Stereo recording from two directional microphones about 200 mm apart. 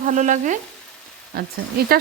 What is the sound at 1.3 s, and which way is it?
Dishes, 50° right (ahead or behind).